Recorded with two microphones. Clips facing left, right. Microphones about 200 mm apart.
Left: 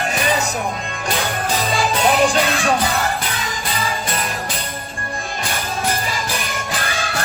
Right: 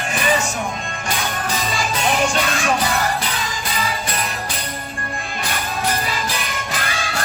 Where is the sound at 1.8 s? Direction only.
35° left (ahead or behind).